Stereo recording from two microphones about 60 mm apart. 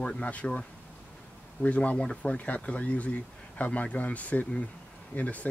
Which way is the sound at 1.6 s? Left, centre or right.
Left.